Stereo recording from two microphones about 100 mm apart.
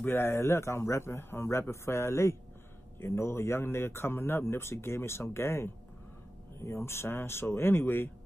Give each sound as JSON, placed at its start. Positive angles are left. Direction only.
{"t": 0.0, "sound": "speech", "side_deg": 25}